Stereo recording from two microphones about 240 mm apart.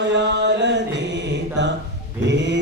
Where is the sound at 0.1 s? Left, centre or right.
Right.